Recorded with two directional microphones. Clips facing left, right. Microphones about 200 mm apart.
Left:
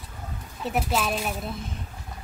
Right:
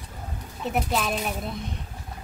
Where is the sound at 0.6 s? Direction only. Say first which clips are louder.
Even; centre (ahead or behind).